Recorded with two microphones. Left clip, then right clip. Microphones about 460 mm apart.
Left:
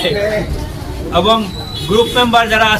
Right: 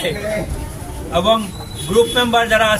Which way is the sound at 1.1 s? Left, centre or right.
Right.